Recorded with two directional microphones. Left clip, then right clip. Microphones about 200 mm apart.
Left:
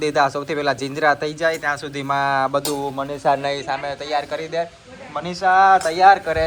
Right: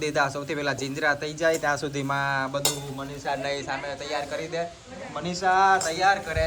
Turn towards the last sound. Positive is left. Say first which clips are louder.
# left 9 dB
turn(degrees=0)  # may be behind; listen again after turning